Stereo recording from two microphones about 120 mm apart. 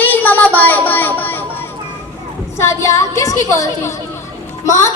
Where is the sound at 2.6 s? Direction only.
25° left (ahead or behind).